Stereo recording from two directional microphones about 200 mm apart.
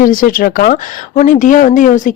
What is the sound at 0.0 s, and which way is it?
Speech, 45° left (ahead or behind).